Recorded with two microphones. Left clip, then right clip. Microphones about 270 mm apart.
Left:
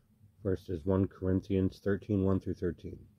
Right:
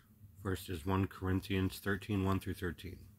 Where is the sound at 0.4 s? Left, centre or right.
Centre.